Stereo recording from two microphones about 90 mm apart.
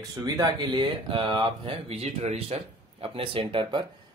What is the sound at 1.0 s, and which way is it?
Speech, 65° right (ahead or behind).